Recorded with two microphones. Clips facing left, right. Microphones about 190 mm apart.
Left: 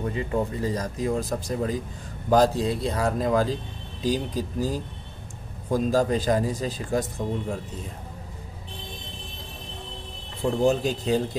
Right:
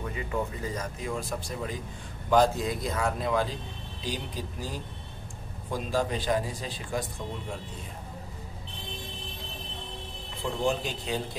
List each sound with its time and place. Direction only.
0.0 s a man's voice: 35° left (ahead or behind)
10.4 s speech: 40° left (ahead or behind)